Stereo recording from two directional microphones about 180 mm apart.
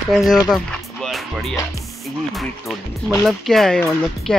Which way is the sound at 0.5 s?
Centre (ahead or behind).